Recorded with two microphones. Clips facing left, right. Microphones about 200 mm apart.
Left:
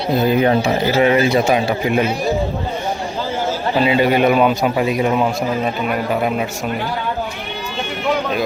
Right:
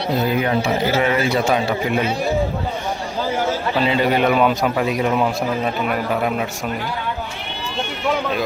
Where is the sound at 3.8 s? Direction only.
10° left (ahead or behind).